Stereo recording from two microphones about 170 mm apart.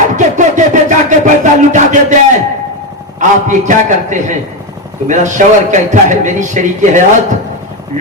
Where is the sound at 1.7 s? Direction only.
45° right (ahead or behind).